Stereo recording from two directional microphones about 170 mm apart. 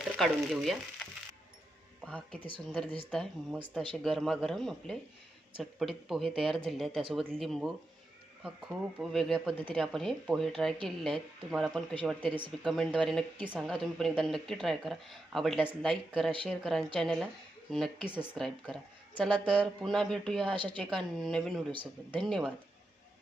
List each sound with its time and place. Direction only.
0.2 s speech: centre (ahead or behind)
2.0 s speech: 5° left (ahead or behind)
9.0 s speech: centre (ahead or behind)
12.2 s speech: 30° right (ahead or behind)
12.5 s speech: centre (ahead or behind)